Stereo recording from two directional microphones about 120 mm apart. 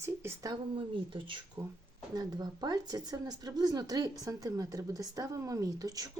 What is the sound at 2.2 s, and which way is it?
Speech, 35° right (ahead or behind).